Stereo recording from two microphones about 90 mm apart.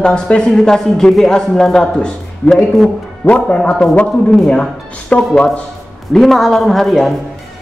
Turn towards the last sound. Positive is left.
turn(degrees=0)  # may be behind; listen again after turning